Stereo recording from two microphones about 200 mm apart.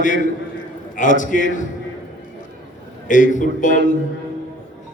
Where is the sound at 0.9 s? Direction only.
40° left (ahead or behind).